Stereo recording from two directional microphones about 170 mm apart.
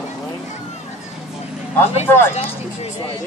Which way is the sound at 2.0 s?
15° left (ahead or behind).